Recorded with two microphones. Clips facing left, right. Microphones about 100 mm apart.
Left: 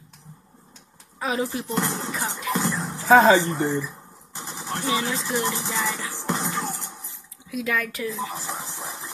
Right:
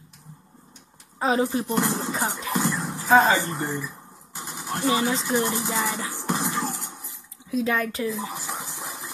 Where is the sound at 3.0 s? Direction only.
90° left.